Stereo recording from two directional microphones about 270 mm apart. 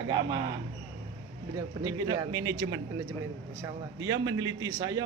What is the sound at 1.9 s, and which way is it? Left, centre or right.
Speech, centre.